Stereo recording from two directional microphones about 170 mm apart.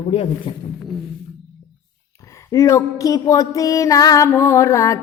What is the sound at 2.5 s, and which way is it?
Music, 15° left (ahead or behind).